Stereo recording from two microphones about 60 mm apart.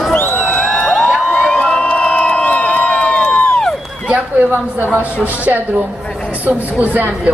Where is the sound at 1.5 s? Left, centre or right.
Centre.